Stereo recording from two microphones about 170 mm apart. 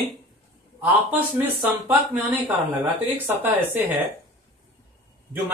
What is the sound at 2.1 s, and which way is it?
Speech, 10° right (ahead or behind).